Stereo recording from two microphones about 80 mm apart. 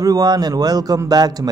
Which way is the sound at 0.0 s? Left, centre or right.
Right.